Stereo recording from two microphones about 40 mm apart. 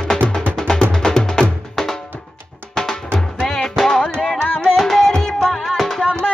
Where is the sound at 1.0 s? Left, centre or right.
Centre.